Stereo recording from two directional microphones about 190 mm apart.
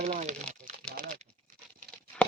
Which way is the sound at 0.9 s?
40° right (ahead or behind).